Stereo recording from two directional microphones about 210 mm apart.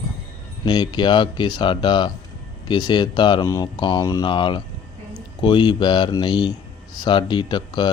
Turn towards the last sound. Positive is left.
turn(degrees=20)  # may be behind; listen again after turning